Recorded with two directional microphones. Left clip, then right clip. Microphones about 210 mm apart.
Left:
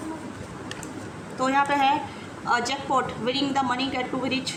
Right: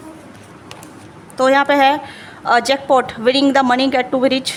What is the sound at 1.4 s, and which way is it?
A woman's voice, 55° right (ahead or behind).